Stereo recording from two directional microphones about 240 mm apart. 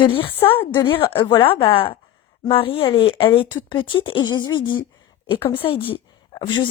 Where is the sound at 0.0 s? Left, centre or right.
Left.